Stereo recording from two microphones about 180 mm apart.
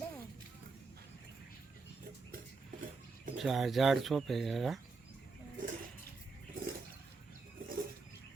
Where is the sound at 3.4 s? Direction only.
Centre (ahead or behind).